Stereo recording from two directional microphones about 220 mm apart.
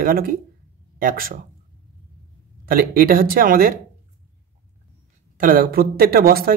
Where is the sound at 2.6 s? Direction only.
40° right (ahead or behind).